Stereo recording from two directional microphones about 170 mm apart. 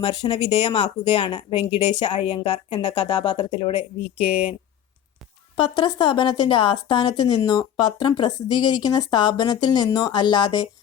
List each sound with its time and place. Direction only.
0.0 s speech: 25° left (ahead or behind)
4.3 s speech: 35° left (ahead or behind)
5.5 s speech: 30° left (ahead or behind)